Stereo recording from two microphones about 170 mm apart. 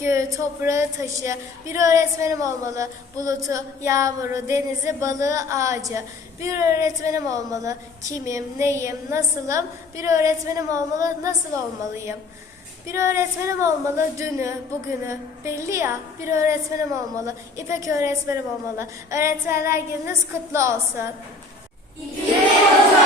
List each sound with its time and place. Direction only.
0.0 s a woman's voice: 15° right (ahead or behind)